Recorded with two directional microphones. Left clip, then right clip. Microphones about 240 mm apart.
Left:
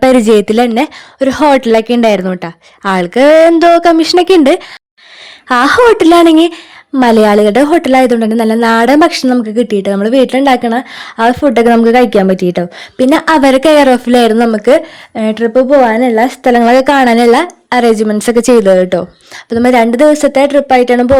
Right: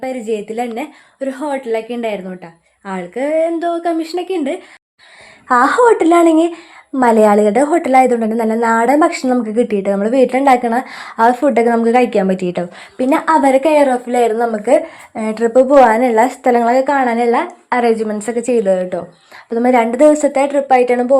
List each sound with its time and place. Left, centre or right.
0.0 s speech: left
5.5 s a woman's voice: left